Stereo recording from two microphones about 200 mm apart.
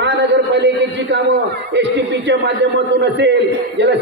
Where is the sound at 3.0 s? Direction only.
60° right (ahead or behind).